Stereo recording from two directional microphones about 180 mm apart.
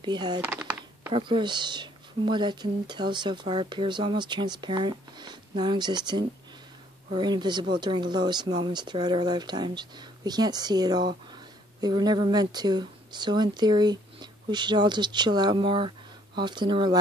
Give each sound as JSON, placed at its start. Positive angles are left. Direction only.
{"t": 0.0, "sound": "speech", "side_deg": -25}
{"t": 0.4, "sound": "typing", "side_deg": -10}
{"t": 1.1, "sound": "speech", "side_deg": -25}